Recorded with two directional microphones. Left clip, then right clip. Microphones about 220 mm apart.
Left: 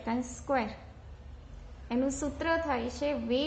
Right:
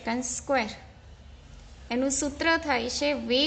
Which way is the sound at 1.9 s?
30° right (ahead or behind).